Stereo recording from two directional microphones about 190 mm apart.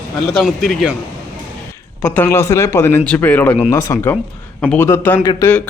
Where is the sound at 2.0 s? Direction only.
10° left (ahead or behind).